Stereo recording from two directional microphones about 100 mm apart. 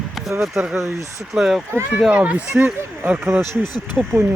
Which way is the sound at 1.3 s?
5° right (ahead or behind).